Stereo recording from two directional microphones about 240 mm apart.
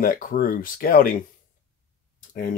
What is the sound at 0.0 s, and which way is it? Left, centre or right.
Speech, left.